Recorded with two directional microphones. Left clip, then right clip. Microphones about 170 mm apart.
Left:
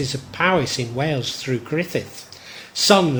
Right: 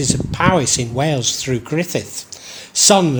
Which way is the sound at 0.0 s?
35° right (ahead or behind).